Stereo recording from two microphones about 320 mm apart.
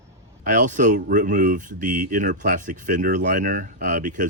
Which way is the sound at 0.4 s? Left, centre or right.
Right.